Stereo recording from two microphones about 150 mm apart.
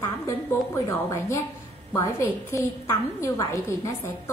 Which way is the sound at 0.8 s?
20° left (ahead or behind).